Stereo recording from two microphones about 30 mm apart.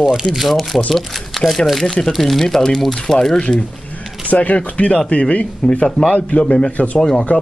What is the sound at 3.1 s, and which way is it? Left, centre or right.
Speech, left.